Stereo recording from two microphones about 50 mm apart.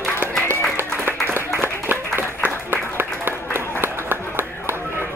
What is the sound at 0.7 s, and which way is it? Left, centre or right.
Applause, right.